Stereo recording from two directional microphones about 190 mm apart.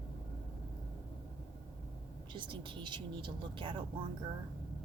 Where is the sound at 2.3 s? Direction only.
25° right (ahead or behind).